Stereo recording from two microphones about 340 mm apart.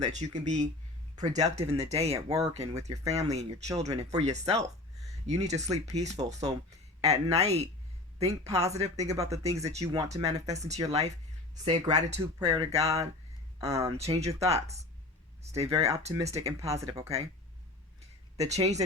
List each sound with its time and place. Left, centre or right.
0.0 s speech: centre
18.3 s speech: centre